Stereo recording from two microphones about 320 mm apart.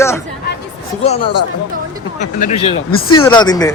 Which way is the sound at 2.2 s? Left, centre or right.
Left.